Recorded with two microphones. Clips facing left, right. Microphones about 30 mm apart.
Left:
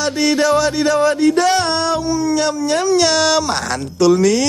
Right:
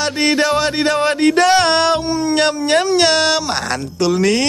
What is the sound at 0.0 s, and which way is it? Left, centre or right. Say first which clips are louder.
Music: even; right.